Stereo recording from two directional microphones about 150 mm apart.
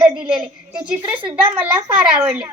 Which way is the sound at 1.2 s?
35° right (ahead or behind).